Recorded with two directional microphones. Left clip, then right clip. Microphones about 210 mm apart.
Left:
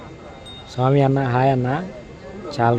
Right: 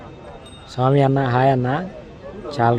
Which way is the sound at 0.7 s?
Centre (ahead or behind).